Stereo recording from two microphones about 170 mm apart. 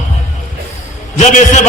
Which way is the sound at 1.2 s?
45° left (ahead or behind).